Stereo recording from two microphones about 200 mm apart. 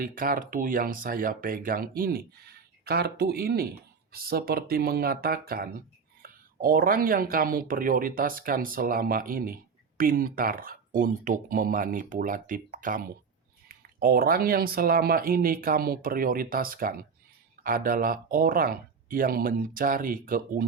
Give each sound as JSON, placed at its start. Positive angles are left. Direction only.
{"t": 0.0, "sound": "speech", "side_deg": -45}